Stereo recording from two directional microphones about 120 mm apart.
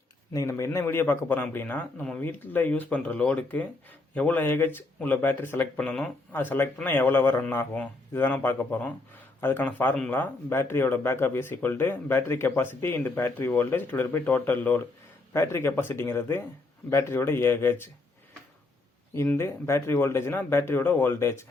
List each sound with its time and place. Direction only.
0.3 s a man's voice: 25° left (ahead or behind)
19.1 s speech: 20° left (ahead or behind)